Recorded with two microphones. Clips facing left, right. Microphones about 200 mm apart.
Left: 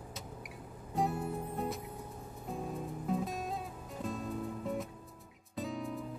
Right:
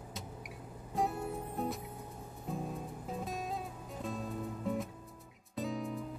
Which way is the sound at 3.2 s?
Centre (ahead or behind).